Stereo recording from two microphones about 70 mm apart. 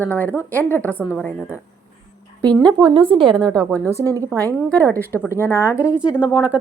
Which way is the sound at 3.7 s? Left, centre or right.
Right.